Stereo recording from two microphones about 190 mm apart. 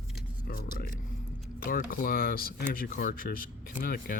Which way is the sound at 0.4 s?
50° left (ahead or behind).